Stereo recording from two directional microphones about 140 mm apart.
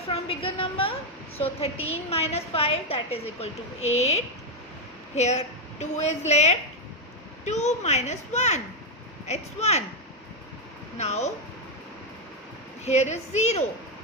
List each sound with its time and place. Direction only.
0.1 s a woman's voice: 45° left (ahead or behind)
10.9 s a woman's voice: 50° left (ahead or behind)
12.8 s a woman's voice: 55° left (ahead or behind)